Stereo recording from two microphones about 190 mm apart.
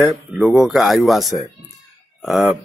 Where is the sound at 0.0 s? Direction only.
5° right (ahead or behind).